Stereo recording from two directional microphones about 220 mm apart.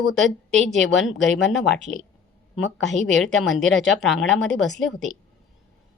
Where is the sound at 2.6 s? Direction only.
55° left (ahead or behind).